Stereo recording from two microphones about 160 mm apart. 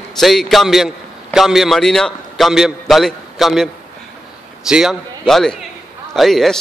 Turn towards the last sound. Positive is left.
turn(degrees=0)  # may be behind; listen again after turning